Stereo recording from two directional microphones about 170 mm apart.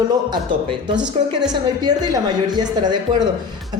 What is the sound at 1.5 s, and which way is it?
A woman's voice, 25° right (ahead or behind).